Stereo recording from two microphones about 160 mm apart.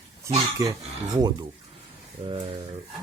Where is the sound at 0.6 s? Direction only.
20° right (ahead or behind).